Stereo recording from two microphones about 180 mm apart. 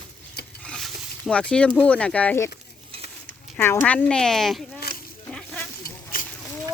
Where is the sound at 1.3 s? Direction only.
5° left (ahead or behind).